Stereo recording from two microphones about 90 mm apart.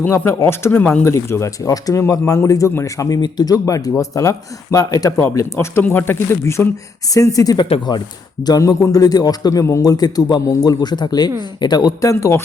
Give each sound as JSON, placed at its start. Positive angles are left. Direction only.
{"t": 0.0, "sound": "speech", "side_deg": 30}
{"t": 3.2, "sound": "speech", "side_deg": 55}
{"t": 7.1, "sound": "a man's voice", "side_deg": 40}